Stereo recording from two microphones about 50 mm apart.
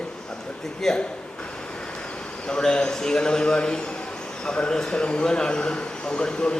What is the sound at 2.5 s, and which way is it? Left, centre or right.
A man's voice, centre.